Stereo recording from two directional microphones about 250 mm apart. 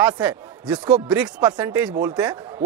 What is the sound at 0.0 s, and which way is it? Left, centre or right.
Speech, centre.